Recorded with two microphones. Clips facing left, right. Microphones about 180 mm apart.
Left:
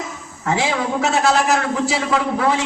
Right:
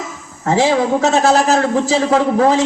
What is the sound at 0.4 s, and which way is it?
A man's voice, 40° right (ahead or behind).